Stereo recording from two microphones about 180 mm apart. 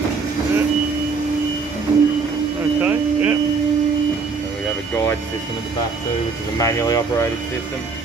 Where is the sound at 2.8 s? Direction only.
10° right (ahead or behind).